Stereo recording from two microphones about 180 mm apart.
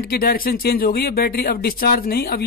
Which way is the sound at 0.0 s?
55° left (ahead or behind).